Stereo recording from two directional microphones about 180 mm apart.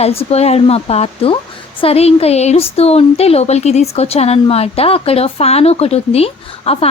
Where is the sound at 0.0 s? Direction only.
35° left (ahead or behind).